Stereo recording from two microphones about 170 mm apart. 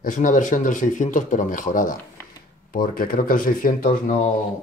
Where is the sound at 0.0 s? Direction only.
50° left (ahead or behind).